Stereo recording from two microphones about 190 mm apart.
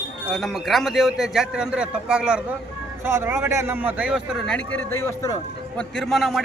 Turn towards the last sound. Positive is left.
turn(degrees=0)  # may be behind; listen again after turning